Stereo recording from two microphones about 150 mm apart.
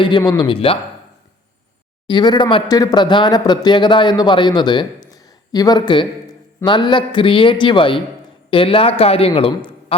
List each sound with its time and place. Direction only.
0.2 s a man's voice: 30° left (ahead or behind)
2.0 s a man's voice: 30° left (ahead or behind)